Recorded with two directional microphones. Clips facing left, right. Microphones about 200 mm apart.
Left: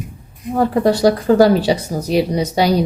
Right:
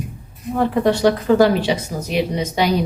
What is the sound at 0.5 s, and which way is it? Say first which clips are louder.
Speech: left 2 dB; 40° left (ahead or behind).